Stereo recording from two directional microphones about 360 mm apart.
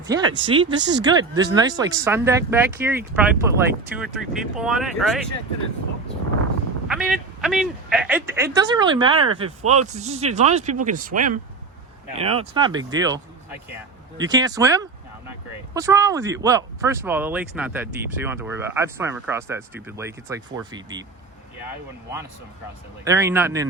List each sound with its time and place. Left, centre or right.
0.1 s speech: centre
6.8 s speech: centre
14.3 s speech: centre
23.0 s speech: centre